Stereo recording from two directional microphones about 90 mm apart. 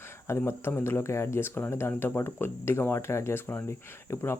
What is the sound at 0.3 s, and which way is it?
Speech, 30° left (ahead or behind).